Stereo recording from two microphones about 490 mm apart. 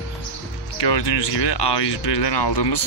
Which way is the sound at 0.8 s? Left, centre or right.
Left.